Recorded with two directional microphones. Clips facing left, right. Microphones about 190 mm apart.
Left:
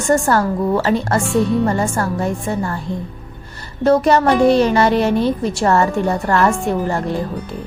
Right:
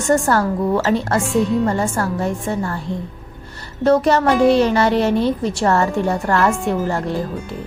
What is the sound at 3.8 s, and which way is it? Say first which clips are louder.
A woman's voice: left 1 dB; 10° left (ahead or behind).